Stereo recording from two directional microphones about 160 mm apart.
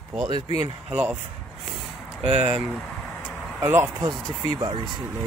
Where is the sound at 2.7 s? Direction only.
10° left (ahead or behind).